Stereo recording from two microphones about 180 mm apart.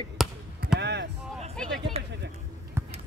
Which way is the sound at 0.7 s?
70° right (ahead or behind).